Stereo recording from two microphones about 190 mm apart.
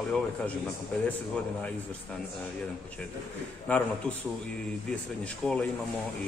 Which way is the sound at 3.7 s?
10° left (ahead or behind).